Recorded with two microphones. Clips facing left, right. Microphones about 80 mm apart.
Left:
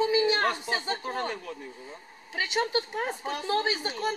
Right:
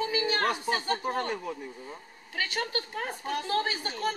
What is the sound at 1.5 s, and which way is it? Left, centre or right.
Speech, centre.